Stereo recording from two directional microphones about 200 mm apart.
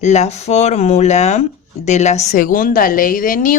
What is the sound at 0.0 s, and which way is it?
Speech, 35° left (ahead or behind).